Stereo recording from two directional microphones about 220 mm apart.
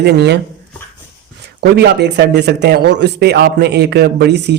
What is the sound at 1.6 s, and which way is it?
Speech, 50° right (ahead or behind).